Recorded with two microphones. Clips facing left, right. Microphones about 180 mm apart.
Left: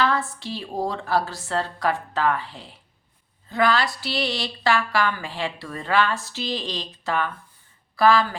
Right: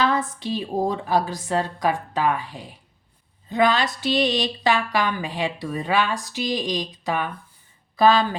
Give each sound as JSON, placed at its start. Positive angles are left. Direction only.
{"t": 0.0, "sound": "speech", "side_deg": -20}